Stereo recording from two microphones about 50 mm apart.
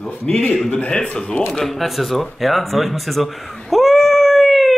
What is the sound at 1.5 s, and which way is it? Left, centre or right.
Speech, centre.